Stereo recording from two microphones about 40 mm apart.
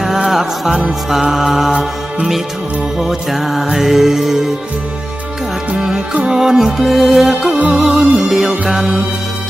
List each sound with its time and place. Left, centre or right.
0.0 s music: centre
3.0 s music: centre
5.7 s music: centre